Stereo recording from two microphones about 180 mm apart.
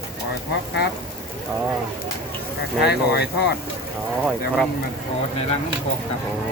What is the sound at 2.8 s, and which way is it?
Speech, 65° left (ahead or behind).